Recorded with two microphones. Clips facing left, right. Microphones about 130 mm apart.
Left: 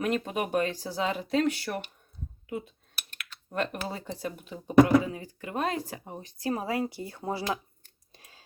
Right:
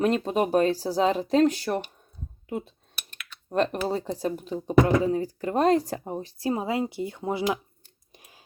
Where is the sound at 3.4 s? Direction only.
35° right (ahead or behind).